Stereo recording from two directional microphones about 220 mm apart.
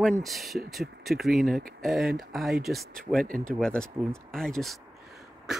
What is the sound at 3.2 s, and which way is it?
Speech, 40° right (ahead or behind).